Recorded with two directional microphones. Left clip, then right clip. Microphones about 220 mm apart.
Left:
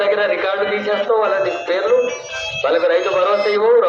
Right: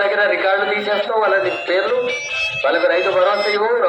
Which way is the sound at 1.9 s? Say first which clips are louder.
Left 2 dB; 20° left (ahead or behind).